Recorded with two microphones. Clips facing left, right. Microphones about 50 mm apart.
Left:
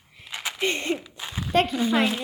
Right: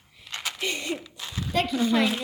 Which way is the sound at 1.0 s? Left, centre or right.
Centre.